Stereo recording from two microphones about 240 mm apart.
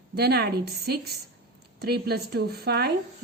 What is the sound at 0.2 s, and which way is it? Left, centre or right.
A woman's voice, right.